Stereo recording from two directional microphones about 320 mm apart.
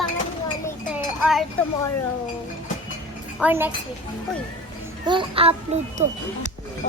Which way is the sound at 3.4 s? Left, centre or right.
Centre.